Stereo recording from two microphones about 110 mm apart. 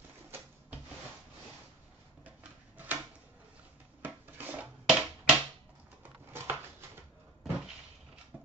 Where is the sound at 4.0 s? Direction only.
15° right (ahead or behind).